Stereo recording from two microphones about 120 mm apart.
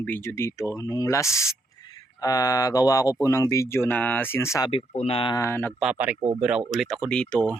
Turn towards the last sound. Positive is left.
turn(degrees=10)  # may be behind; listen again after turning